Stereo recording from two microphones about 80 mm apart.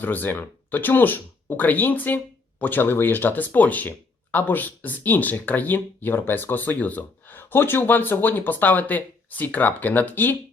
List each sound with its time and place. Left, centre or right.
0.0 s speech: left